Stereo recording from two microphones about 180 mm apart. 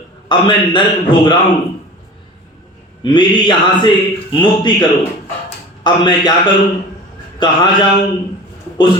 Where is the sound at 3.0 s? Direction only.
25° left (ahead or behind).